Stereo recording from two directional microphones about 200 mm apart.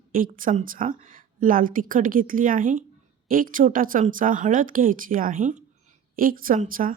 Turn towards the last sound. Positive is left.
turn(degrees=-45)  # may be behind; listen again after turning